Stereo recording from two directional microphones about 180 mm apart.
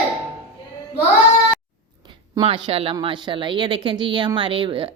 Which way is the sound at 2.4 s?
30° right (ahead or behind).